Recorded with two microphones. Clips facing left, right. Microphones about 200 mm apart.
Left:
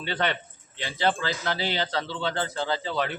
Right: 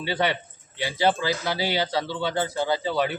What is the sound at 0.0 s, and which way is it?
A man's voice, 10° right (ahead or behind).